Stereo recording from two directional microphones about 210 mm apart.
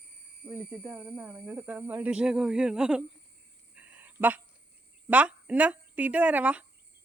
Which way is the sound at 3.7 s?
5° right (ahead or behind).